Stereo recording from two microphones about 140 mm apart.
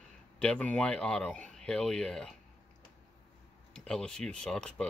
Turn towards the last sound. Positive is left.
turn(degrees=5)  # may be behind; listen again after turning